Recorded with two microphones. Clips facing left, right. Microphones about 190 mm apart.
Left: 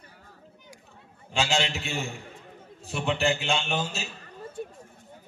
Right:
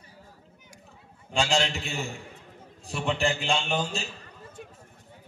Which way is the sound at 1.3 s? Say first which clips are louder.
Right 1 dB; centre (ahead or behind).